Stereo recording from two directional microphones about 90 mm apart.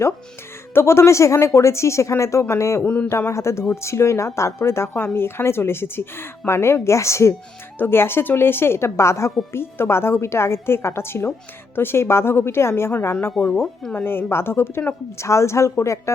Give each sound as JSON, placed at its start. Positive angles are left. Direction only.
{"t": 0.7, "sound": "speech", "side_deg": 30}
{"t": 2.8, "sound": "speech", "side_deg": 15}
{"t": 3.1, "sound": "a woman's voice", "side_deg": 30}
{"t": 13.4, "sound": "speech", "side_deg": 0}
{"t": 13.9, "sound": "a woman's voice", "side_deg": 25}